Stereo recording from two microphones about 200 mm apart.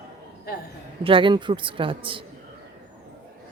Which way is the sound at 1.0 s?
25° right (ahead or behind).